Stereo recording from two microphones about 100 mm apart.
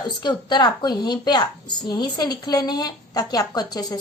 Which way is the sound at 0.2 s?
45° left (ahead or behind).